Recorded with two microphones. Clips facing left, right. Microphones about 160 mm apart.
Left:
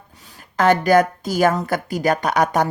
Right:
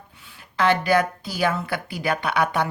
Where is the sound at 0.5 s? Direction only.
45° left (ahead or behind).